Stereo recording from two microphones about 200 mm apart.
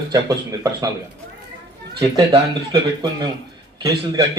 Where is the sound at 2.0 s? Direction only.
25° right (ahead or behind).